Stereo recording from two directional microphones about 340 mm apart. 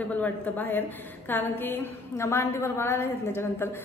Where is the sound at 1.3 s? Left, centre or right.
Centre.